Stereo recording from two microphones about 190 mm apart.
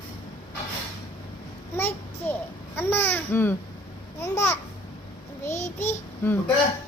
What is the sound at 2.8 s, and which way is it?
Speech, 10° left (ahead or behind).